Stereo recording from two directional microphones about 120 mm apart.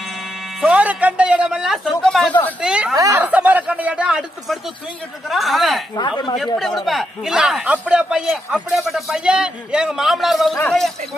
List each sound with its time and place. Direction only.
0.6 s speech: 10° right (ahead or behind)
2.0 s a man's voice: 5° left (ahead or behind)
2.6 s a man's voice: 10° right (ahead or behind)
5.9 s speech: 40° left (ahead or behind)
6.3 s a man's voice: centre (ahead or behind)